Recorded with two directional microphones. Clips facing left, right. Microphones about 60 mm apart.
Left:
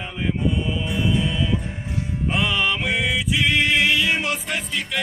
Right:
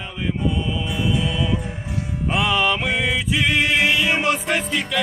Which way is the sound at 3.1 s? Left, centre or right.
Right.